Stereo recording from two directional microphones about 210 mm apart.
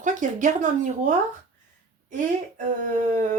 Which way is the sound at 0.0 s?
35° right (ahead or behind).